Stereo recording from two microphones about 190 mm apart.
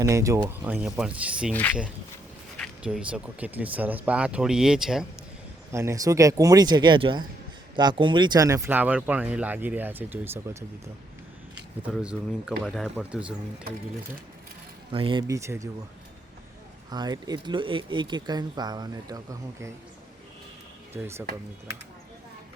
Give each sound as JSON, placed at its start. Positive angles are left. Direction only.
{"t": 0.0, "sound": "speech", "side_deg": -15}
{"t": 1.5, "sound": "speech", "side_deg": 10}
{"t": 2.6, "sound": "speech", "side_deg": -5}
{"t": 5.7, "sound": "speech", "side_deg": -15}
{"t": 11.9, "sound": "speech", "side_deg": 0}
{"t": 14.9, "sound": "speech", "side_deg": -30}
{"t": 15.3, "sound": "speech", "side_deg": -15}
{"t": 16.9, "sound": "speech", "side_deg": -20}
{"t": 20.9, "sound": "speech", "side_deg": -10}